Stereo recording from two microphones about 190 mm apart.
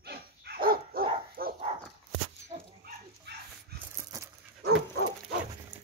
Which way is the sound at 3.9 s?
15° right (ahead or behind).